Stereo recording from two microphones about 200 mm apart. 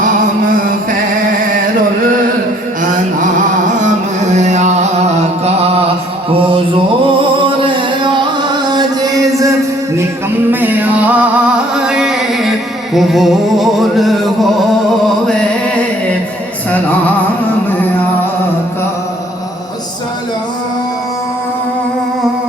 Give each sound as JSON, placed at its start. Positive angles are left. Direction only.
{"t": 3.8, "sound": "music", "side_deg": -35}
{"t": 6.3, "sound": "mantra", "side_deg": -25}
{"t": 7.4, "sound": "music", "side_deg": -25}
{"t": 10.5, "sound": "music", "side_deg": -10}